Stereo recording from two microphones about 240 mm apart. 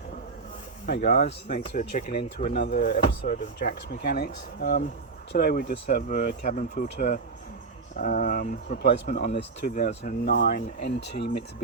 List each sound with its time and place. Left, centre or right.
0.9 s speech: left
9.2 s speech: left
9.6 s speech: left
10.3 s speech: left